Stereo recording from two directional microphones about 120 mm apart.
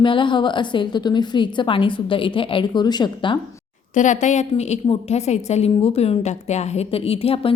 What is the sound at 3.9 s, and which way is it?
A woman's voice, 90° left.